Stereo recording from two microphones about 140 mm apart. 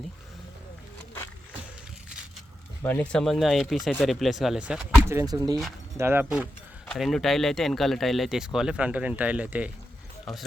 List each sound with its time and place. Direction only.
2.8 s speech: 10° left (ahead or behind); by 4.9 s 5° right (ahead or behind)
5.0 s speech: 25° right (ahead or behind)
6.0 s speech: 15° right (ahead or behind)
6.9 s speech: centre (ahead or behind)
10.3 s speech: centre (ahead or behind)